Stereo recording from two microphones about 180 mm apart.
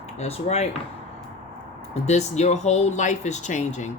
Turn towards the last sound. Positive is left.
turn(degrees=40)  # may be behind; listen again after turning